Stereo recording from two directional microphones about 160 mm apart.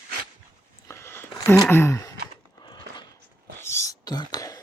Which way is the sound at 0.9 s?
15° left (ahead or behind).